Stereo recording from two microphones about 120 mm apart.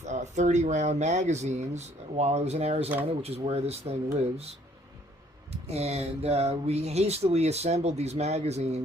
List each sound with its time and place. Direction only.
0.0 s speech: 75° right (ahead or behind); by 3.9 s 55° right (ahead or behind)
5.6 s speech: 60° right (ahead or behind)